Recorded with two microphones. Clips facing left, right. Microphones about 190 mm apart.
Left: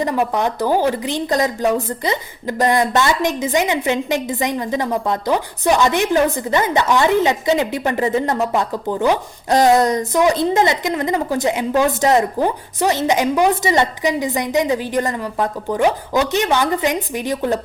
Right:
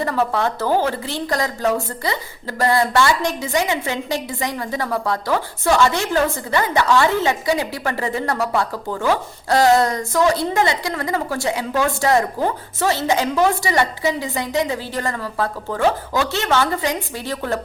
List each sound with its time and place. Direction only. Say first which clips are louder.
0.0 s a woman's voice: left 2 dB; 15° left (ahead or behind)